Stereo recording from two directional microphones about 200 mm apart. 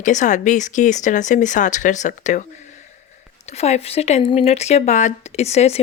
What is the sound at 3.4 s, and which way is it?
Speech, 35° left (ahead or behind).